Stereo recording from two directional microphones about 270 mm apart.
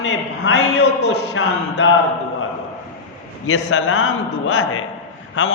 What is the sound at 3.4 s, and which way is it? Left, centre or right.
A man's voice, left.